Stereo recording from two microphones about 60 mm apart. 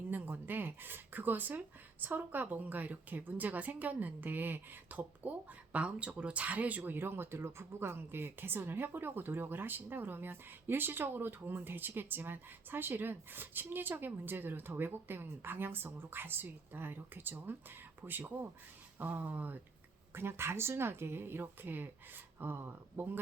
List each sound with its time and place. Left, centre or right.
0.1 s speech: right
20.1 s speech: right